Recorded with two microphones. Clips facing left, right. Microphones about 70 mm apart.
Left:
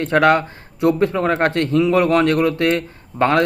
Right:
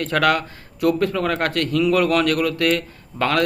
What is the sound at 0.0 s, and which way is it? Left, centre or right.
Speech, left.